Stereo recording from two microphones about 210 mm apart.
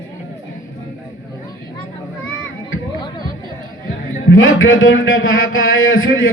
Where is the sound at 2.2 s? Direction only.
70° left (ahead or behind).